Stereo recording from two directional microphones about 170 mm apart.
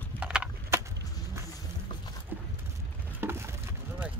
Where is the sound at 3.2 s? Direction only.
15° right (ahead or behind).